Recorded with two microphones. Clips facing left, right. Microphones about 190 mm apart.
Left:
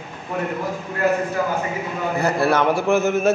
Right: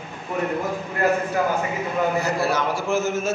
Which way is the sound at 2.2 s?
60° left (ahead or behind).